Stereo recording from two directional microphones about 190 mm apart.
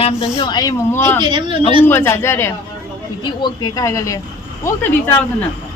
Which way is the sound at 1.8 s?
10° left (ahead or behind).